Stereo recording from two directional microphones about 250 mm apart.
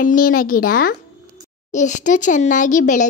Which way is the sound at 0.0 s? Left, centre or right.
Left.